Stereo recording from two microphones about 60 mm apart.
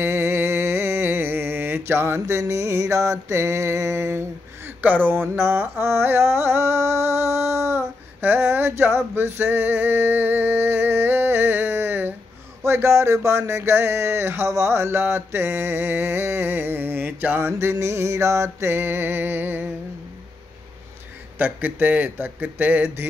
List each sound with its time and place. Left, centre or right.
0.0 s music: right
2.2 s mantra: right
4.6 s mantra: right
12.6 s a sound: right
17.6 s a sound: right
21.4 s speech: right